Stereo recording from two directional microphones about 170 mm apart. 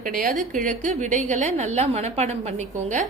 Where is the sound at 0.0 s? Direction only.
50° right (ahead or behind).